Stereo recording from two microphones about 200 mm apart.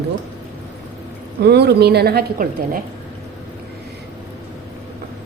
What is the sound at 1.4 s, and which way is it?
A woman's voice, 55° right (ahead or behind).